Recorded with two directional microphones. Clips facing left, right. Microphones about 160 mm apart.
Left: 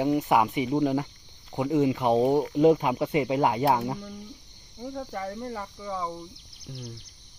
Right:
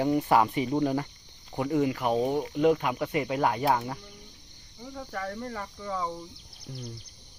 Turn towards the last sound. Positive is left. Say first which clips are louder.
# even
turn(degrees=0)  # may be behind; listen again after turning